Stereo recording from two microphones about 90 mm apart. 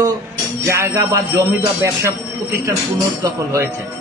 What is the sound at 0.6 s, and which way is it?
A man's voice, 30° right (ahead or behind).